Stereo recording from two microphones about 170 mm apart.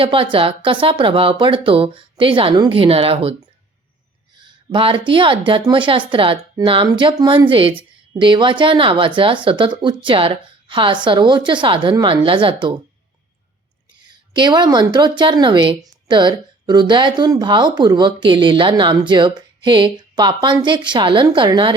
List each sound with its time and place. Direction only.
0.0 s speech: 30° right (ahead or behind)
4.4 s speech: 30° right (ahead or behind)
14.0 s a woman's voice: 25° right (ahead or behind)